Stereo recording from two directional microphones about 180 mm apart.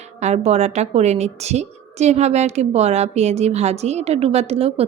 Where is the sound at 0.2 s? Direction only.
35° right (ahead or behind).